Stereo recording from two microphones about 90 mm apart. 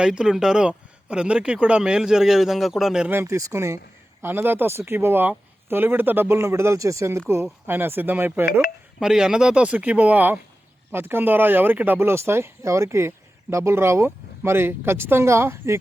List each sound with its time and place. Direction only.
0.0 s speech: 10° right (ahead or behind)
3.1 s speech: 30° right (ahead or behind)
7.7 s speech: 25° right (ahead or behind)
9.0 s speech: 10° right (ahead or behind); by 15.8 s 30° right (ahead or behind)